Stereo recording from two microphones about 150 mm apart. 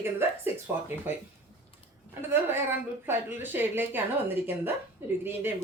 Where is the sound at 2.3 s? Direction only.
15° right (ahead or behind).